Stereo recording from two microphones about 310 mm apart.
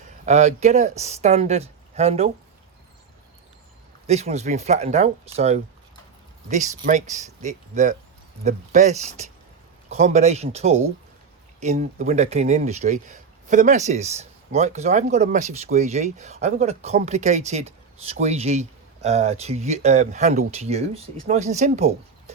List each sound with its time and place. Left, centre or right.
0.3 s speech: right
4.0 s speech: right